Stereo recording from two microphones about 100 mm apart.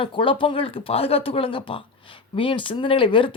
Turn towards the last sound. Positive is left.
turn(degrees=60)  # may be behind; listen again after turning